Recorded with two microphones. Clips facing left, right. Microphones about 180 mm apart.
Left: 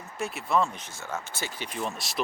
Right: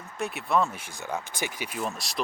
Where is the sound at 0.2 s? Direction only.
Centre (ahead or behind).